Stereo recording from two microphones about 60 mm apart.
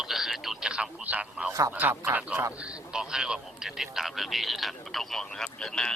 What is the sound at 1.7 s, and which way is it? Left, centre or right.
Speech, right.